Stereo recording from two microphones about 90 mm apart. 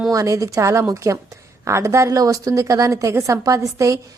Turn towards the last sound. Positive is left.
turn(degrees=-35)  # may be behind; listen again after turning